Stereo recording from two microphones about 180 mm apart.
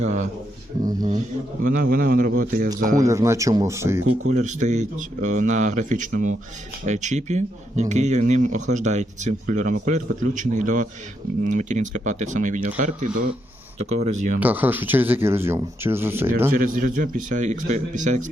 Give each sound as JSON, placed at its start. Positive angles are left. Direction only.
{"t": 0.8, "sound": "speech", "side_deg": -20}
{"t": 1.6, "sound": "speech", "side_deg": -50}
{"t": 3.0, "sound": "speech", "side_deg": -15}
{"t": 4.1, "sound": "speech", "side_deg": -40}
{"t": 13.7, "sound": "speech", "side_deg": -40}
{"t": 14.3, "sound": "speech", "side_deg": -10}
{"t": 16.5, "sound": "speech", "side_deg": -50}